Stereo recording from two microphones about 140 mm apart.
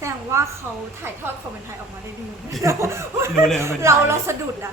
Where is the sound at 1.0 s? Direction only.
15° right (ahead or behind).